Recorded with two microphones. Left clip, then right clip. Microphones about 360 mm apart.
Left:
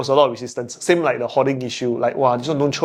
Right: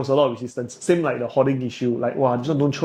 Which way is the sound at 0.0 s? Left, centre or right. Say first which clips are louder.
Left 3 dB; left.